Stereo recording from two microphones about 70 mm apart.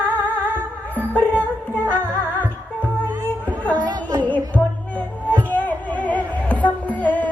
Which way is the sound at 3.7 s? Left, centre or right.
Right.